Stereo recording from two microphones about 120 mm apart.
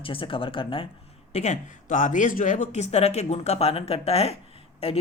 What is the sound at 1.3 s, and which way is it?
Speech, 80° left.